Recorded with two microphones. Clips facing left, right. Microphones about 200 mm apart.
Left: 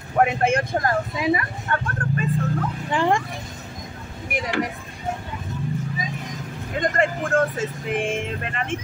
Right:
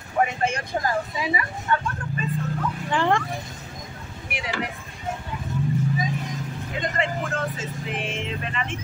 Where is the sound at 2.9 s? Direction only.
15° left (ahead or behind).